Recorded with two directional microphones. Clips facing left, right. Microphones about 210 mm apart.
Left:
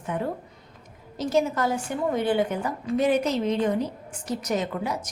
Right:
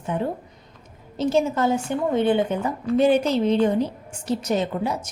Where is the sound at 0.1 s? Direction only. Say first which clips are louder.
Right 3 dB; 30° right (ahead or behind).